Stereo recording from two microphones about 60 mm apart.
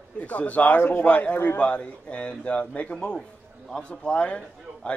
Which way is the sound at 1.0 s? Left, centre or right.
Left.